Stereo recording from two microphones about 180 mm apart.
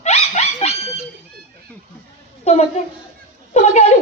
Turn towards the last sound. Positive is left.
turn(degrees=40)  # may be behind; listen again after turning